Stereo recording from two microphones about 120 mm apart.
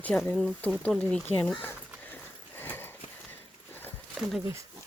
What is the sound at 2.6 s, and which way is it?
Horse, 15° left (ahead or behind).